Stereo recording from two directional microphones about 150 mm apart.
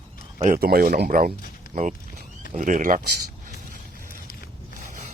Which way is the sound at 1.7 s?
55° right (ahead or behind).